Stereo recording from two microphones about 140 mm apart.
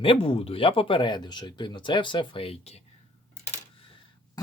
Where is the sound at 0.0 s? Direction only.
40° left (ahead or behind).